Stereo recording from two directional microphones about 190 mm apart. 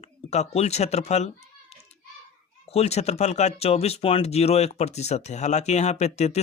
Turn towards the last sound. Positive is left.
turn(degrees=35)  # may be behind; listen again after turning